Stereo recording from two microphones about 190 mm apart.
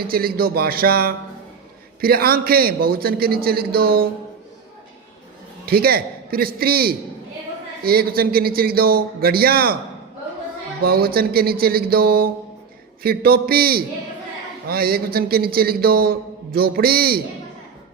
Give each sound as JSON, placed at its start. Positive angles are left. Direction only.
{"t": 0.1, "sound": "a man's voice", "side_deg": -50}
{"t": 5.6, "sound": "a man's voice", "side_deg": -50}
{"t": 10.8, "sound": "a man's voice", "side_deg": -55}